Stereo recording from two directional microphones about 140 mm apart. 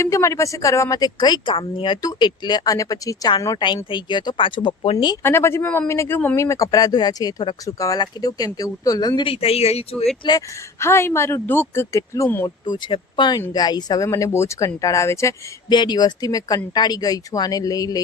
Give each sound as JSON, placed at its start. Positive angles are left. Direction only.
{"t": 0.0, "sound": "speech", "side_deg": 20}
{"t": 5.2, "sound": "speech", "side_deg": 20}
{"t": 9.3, "sound": "speech", "side_deg": 45}
{"t": 10.2, "sound": "speech", "side_deg": 30}
{"t": 10.8, "sound": "speech", "side_deg": 20}
{"t": 12.6, "sound": "speech", "side_deg": 35}
{"t": 15.7, "sound": "speech", "side_deg": 30}